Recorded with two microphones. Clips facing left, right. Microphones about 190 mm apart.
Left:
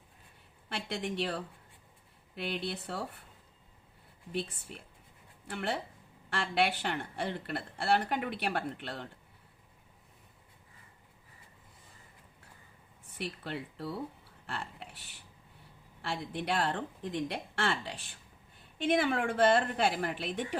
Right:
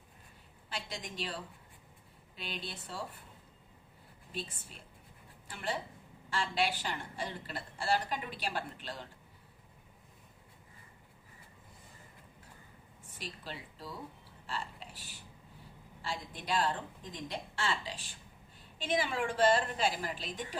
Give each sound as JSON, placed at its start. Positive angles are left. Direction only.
{"t": 0.7, "sound": "a woman's voice", "side_deg": 65}
{"t": 4.3, "sound": "a woman's voice", "side_deg": 65}
{"t": 13.1, "sound": "speech", "side_deg": 65}
{"t": 14.4, "sound": "a sound", "side_deg": 60}
{"t": 16.0, "sound": "a woman's voice", "side_deg": 65}